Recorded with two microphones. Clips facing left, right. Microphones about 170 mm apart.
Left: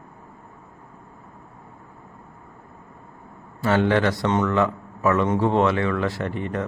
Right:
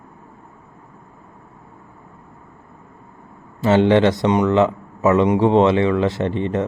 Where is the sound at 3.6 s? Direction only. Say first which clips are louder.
Right 6 dB; 20° right (ahead or behind).